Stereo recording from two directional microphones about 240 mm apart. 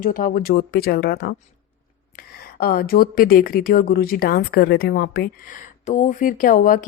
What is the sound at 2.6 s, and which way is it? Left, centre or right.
Speech, left.